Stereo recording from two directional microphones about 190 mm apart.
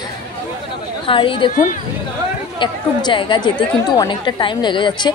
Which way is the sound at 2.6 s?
25° left (ahead or behind).